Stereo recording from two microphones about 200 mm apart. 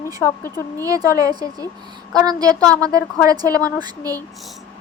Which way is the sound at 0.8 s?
15° right (ahead or behind).